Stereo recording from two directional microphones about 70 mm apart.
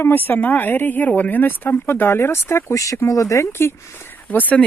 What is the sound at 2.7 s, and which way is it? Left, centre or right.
Speech, left.